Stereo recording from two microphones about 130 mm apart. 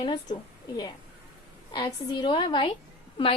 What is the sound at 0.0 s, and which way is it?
Speech, 35° left (ahead or behind).